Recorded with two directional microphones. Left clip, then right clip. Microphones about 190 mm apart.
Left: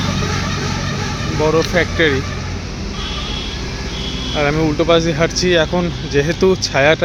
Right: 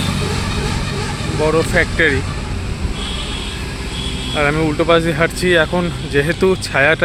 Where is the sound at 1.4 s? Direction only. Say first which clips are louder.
Even; centre (ahead or behind).